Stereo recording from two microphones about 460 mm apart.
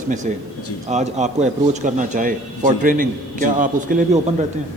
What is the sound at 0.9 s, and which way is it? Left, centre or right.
A man's voice, centre.